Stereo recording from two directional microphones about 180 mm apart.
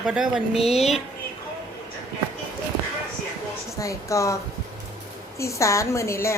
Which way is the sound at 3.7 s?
15° left (ahead or behind).